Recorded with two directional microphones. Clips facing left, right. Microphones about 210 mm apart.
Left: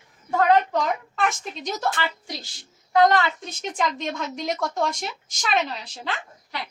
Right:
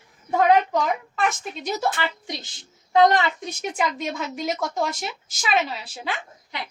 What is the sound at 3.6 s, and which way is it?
A woman's voice, 5° right (ahead or behind).